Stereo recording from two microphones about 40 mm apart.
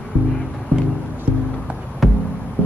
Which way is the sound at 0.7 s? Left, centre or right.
Left.